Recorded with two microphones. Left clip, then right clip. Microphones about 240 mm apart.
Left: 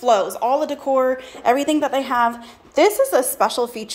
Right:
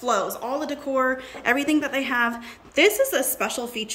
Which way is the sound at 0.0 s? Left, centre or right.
Centre.